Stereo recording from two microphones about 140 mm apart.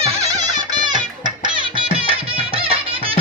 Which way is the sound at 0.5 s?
30° right (ahead or behind).